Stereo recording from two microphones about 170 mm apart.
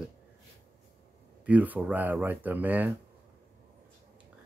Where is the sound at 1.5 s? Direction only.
10° right (ahead or behind).